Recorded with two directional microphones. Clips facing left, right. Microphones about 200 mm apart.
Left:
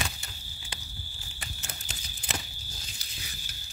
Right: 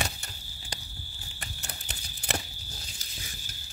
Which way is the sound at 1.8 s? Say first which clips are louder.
Right 5 dB; 65° right (ahead or behind).